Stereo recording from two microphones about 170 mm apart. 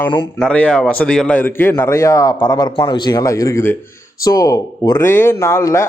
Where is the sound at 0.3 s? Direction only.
5° left (ahead or behind).